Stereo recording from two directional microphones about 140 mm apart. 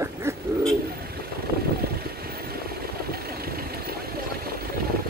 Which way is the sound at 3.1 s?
90° right.